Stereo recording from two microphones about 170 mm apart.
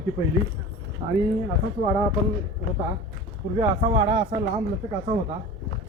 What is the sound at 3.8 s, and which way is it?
Speech, 35° right (ahead or behind).